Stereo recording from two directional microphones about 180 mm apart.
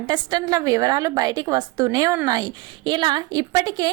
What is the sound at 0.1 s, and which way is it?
A woman's voice, 25° right (ahead or behind).